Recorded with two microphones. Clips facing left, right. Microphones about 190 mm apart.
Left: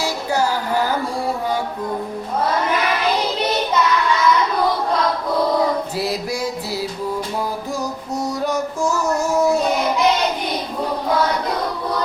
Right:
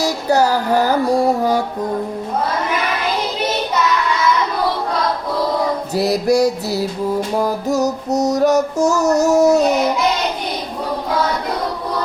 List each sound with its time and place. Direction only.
0.0 s a sound: 40° right (ahead or behind)
5.9 s mantra: 40° right (ahead or behind)
7.3 s music: 45° right (ahead or behind)
9.0 s child singing: 40° right (ahead or behind)